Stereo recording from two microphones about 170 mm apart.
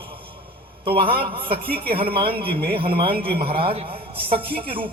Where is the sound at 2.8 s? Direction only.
30° right (ahead or behind).